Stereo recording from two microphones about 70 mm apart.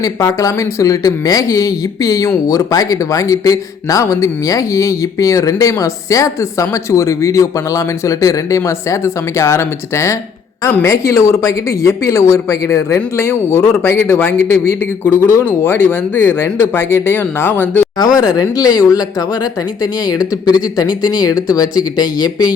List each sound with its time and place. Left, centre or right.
0.0 s a man's voice: left
18.3 s speech: left